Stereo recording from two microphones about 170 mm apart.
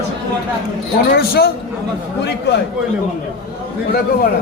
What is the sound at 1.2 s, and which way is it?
Speech, 65° left (ahead or behind).